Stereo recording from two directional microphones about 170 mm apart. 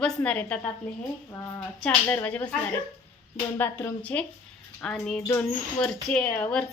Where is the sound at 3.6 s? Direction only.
10° left (ahead or behind).